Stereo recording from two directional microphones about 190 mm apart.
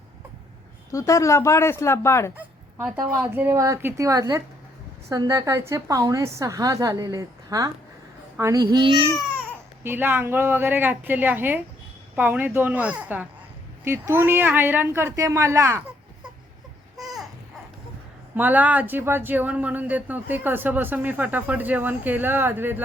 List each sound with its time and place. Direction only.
0.9 s speech: 15° left (ahead or behind)
2.8 s speech: 5° right (ahead or behind); by 9.1 s 25° right (ahead or behind)
9.8 s speech: 10° right (ahead or behind)
17.0 s babbling: centre (ahead or behind)
18.3 s speech: 10° right (ahead or behind)